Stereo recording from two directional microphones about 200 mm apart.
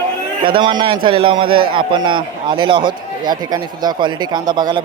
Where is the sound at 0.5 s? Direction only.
25° right (ahead or behind).